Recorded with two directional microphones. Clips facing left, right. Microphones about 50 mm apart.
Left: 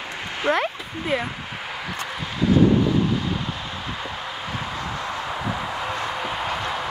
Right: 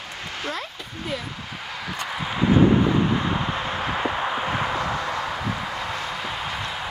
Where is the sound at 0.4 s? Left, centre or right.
Left.